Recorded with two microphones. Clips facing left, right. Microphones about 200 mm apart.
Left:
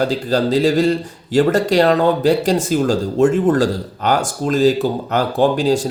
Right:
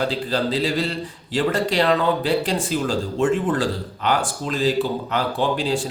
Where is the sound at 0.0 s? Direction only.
40° left (ahead or behind).